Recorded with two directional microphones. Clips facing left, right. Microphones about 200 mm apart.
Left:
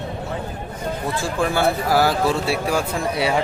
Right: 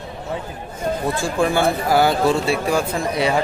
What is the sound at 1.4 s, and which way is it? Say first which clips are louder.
Speech: right 1 dB; centre (ahead or behind).